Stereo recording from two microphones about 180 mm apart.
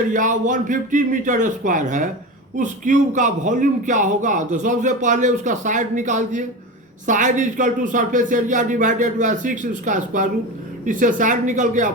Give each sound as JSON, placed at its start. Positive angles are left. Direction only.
{"t": 0.1, "sound": "a man's voice", "side_deg": -45}